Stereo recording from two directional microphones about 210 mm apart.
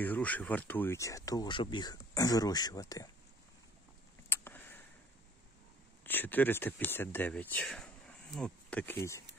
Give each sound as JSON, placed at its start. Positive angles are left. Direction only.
{"t": 0.0, "sound": "speech", "side_deg": 5}
{"t": 4.3, "sound": "a sound", "side_deg": 10}
{"t": 6.0, "sound": "speech", "side_deg": 10}